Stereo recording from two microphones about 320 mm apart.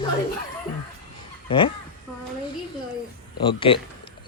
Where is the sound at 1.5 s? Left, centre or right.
Centre.